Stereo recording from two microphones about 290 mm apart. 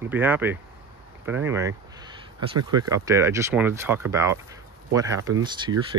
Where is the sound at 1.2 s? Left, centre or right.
Centre.